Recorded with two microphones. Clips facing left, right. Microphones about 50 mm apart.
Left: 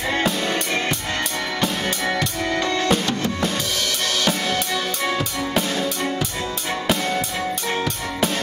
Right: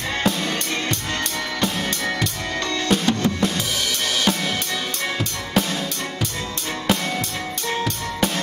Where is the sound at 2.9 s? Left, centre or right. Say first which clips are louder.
Right 5 dB; centre.